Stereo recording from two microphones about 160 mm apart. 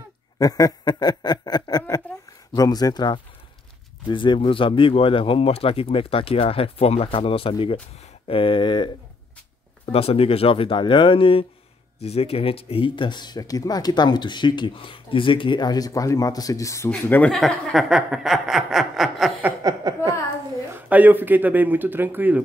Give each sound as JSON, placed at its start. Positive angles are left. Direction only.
{"t": 0.4, "sound": "a sound", "side_deg": 25}
{"t": 2.5, "sound": "speech", "side_deg": 25}
{"t": 9.9, "sound": "speech", "side_deg": 35}
{"t": 19.9, "sound": "a woman's voice", "side_deg": -25}
{"t": 20.7, "sound": "speech", "side_deg": -10}